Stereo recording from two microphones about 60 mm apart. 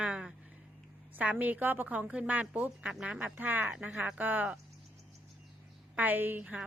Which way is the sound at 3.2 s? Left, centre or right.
Right.